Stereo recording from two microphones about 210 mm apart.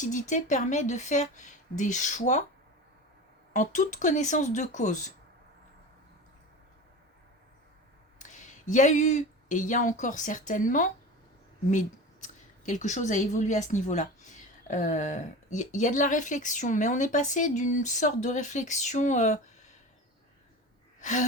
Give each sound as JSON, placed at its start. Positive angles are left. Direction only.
{"t": 0.0, "sound": "speech", "side_deg": 35}
{"t": 3.5, "sound": "speech", "side_deg": 35}
{"t": 8.2, "sound": "speech", "side_deg": 35}
{"t": 21.0, "sound": "sigh", "side_deg": 35}